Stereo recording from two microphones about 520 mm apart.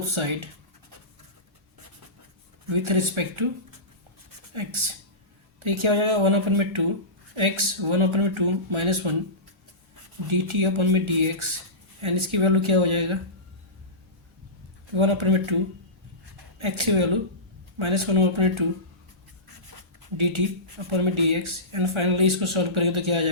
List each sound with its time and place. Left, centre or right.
0.1 s speech: right
2.6 s speech: right
4.5 s speech: right
10.5 s speech: right
14.9 s speech: right
20.1 s speech: right